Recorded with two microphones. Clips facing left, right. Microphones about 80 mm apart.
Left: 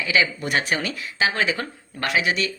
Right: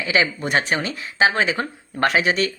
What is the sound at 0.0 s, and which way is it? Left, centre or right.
Speech, right.